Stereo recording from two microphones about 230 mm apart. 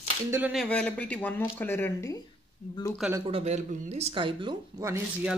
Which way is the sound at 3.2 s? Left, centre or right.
Right.